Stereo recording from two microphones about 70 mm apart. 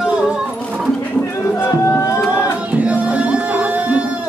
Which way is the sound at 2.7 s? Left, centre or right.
Centre.